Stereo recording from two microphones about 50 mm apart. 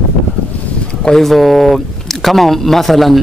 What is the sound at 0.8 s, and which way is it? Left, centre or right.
Speech, centre.